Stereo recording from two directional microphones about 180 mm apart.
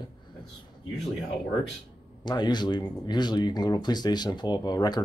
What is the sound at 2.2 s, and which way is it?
Speech, 25° left (ahead or behind).